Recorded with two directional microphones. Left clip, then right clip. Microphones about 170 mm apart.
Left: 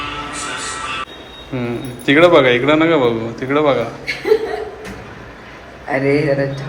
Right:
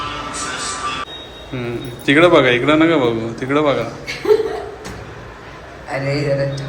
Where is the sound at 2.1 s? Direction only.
15° right (ahead or behind).